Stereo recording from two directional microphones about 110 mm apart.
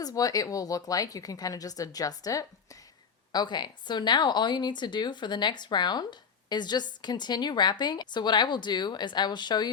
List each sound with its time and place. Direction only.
0.0 s a woman's voice: 35° left (ahead or behind)